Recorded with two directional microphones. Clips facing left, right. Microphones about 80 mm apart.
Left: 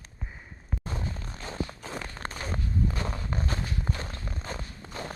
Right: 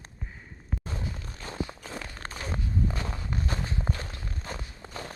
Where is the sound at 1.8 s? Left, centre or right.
Centre.